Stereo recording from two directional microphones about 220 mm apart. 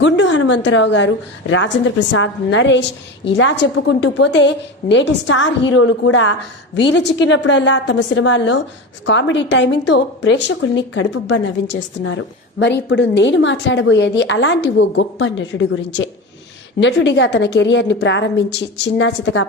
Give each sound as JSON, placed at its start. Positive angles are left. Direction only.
{"t": 0.0, "sound": "a woman's voice", "side_deg": 55}